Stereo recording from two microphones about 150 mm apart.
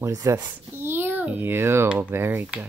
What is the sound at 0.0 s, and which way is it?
A child's voice, 20° right (ahead or behind).